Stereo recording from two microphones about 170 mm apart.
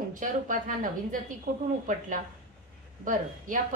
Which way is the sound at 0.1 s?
50° right (ahead or behind).